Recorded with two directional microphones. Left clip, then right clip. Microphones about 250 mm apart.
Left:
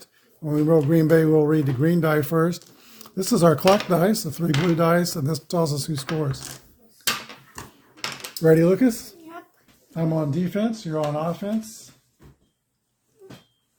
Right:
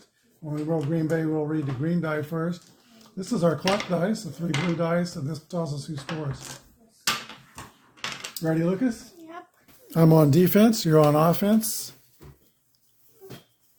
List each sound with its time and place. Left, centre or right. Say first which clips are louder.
0.4 s speech: left 9 dB; left
8.4 s speech: left 9 dB; left
9.9 s speech: right 6 dB; right